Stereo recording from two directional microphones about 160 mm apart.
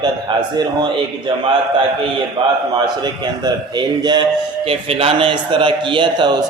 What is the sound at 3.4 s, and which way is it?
A man's voice, 25° right (ahead or behind).